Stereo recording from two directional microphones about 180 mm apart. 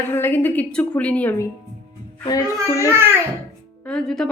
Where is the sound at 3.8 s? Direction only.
5° left (ahead or behind).